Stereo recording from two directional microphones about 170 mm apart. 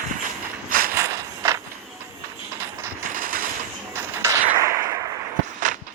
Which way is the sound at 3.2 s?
55° right (ahead or behind).